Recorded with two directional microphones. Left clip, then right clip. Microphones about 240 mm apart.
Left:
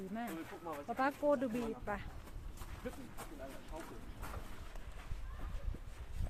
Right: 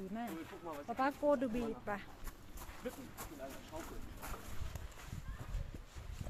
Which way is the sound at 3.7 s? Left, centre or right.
Right.